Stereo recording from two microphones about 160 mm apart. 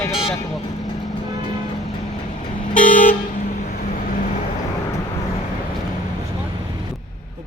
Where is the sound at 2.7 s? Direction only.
55° left (ahead or behind).